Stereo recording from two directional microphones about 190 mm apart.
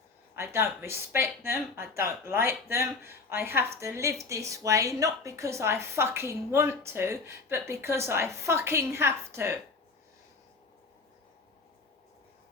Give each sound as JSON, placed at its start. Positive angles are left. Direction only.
{"t": 0.3, "sound": "speech", "side_deg": -15}